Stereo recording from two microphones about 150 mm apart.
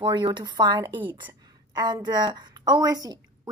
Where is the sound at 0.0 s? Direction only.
30° right (ahead or behind).